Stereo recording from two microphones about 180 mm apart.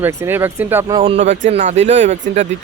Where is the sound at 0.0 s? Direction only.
15° right (ahead or behind).